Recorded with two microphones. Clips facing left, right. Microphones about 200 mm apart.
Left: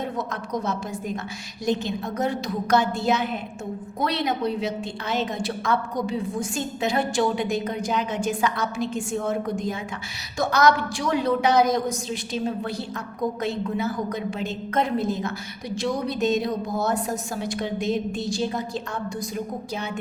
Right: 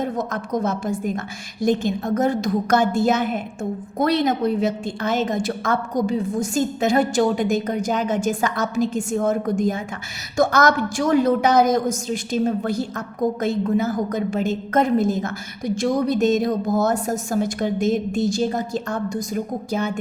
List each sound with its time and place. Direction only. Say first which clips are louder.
0.0 s a woman's voice: right 5 dB; 45° right (ahead or behind)